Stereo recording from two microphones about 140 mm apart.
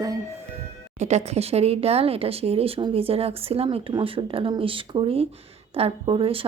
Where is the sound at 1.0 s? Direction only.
55° right (ahead or behind).